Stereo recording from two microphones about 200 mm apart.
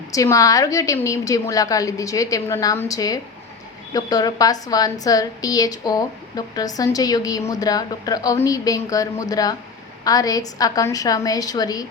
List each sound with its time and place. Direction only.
0.1 s a woman's voice: 15° left (ahead or behind)